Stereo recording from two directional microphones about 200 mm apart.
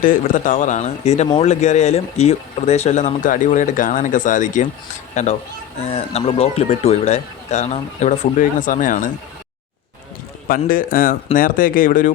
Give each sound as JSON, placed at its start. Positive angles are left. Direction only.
{"t": 0.0, "sound": "speech", "side_deg": 40}
{"t": 10.5, "sound": "speech", "side_deg": 45}